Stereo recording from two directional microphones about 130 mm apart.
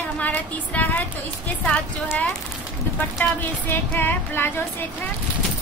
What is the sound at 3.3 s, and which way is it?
A woman's voice, 15° left (ahead or behind).